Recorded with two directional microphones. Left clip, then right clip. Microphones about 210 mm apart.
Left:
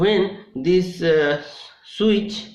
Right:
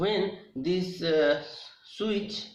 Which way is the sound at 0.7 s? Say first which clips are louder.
Left 10 dB; 55° left (ahead or behind).